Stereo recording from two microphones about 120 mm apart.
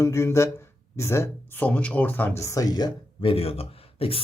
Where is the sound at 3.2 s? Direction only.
50° left (ahead or behind).